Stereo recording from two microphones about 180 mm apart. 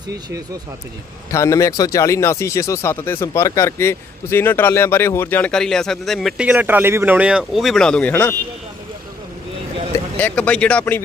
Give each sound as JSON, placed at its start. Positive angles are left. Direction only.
{"t": 1.3, "sound": "speech", "side_deg": 15}
{"t": 9.9, "sound": "speech", "side_deg": 10}